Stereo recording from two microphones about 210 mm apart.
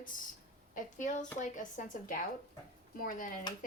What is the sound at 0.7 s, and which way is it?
Speech, 35° left (ahead or behind).